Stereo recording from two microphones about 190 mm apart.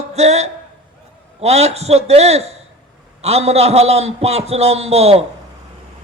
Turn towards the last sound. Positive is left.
turn(degrees=-35)  # may be behind; listen again after turning